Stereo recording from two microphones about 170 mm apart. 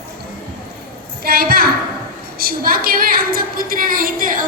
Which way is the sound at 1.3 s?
65° right (ahead or behind).